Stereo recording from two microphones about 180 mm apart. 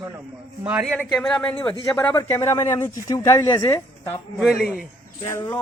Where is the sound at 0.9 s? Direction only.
5° left (ahead or behind).